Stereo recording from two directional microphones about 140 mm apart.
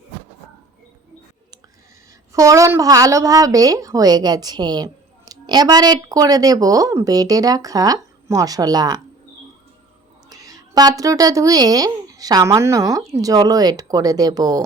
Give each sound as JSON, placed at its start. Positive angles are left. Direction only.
{"t": 2.3, "sound": "a woman's voice", "side_deg": -25}
{"t": 10.2, "sound": "a woman's voice", "side_deg": -25}